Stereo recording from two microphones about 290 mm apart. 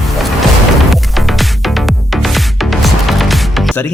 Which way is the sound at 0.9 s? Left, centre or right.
Centre.